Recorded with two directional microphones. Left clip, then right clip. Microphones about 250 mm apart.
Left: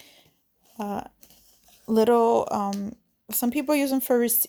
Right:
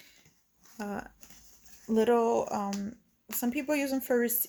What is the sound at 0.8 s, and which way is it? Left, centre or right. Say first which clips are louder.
Speech: left 7 dB; left.